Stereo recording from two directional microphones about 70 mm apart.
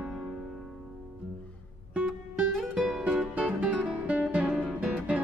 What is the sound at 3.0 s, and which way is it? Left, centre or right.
Music, centre.